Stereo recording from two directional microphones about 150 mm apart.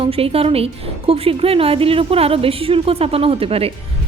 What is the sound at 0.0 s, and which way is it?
A woman's voice, 40° right (ahead or behind).